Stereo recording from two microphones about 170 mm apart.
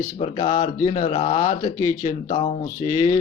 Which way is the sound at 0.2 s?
35° left (ahead or behind).